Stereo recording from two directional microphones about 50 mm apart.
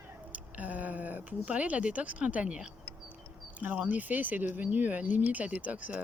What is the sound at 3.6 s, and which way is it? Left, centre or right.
Speech, right.